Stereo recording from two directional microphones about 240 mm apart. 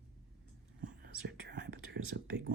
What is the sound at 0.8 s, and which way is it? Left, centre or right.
Whispering, right.